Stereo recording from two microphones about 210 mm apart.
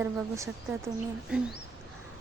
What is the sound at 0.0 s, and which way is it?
Speech, 10° right (ahead or behind).